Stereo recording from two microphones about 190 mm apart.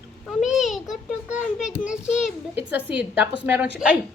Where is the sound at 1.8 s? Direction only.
5° right (ahead or behind).